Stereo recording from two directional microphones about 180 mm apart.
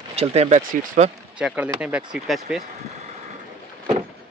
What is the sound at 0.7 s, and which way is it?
Speech, 50° right (ahead or behind).